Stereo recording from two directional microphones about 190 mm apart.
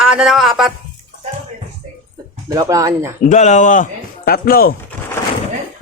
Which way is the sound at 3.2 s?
40° left (ahead or behind).